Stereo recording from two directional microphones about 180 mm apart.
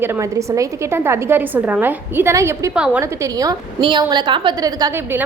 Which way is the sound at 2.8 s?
5° right (ahead or behind).